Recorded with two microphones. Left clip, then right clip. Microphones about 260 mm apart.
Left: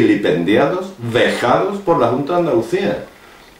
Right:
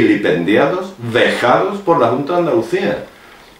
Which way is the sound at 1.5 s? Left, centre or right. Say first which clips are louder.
Right 2 dB; right.